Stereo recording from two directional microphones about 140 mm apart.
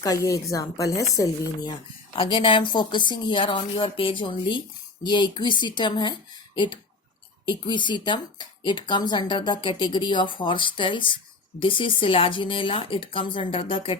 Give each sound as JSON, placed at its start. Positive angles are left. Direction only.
{"t": 0.0, "sound": "speech", "side_deg": 25}
{"t": 2.1, "sound": "speech", "side_deg": 40}
{"t": 7.4, "sound": "speech", "side_deg": 35}